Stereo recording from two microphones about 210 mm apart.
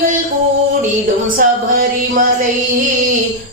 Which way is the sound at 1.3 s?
40° right (ahead or behind).